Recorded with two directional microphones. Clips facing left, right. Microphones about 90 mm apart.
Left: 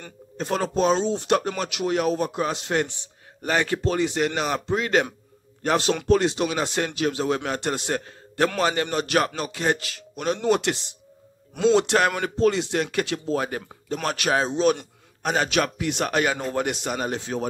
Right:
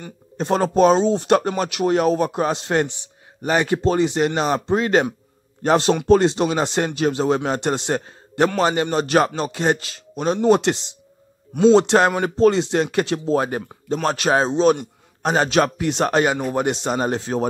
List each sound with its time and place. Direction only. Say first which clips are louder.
0.4 s speech: right 6 dB; 30° right (ahead or behind)
0.7 s speech: right 6 dB; 45° right (ahead or behind)
3.4 s speech: right 5 dB; 20° right (ahead or behind); by 17.5 s 35° right (ahead or behind)